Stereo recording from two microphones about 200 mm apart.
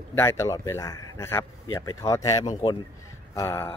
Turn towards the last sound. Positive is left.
turn(degrees=15)  # may be behind; listen again after turning